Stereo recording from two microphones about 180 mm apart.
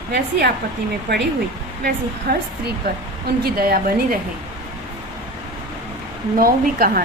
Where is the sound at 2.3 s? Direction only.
60° right (ahead or behind).